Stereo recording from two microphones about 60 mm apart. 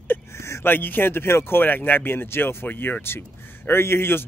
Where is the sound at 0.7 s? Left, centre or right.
Left.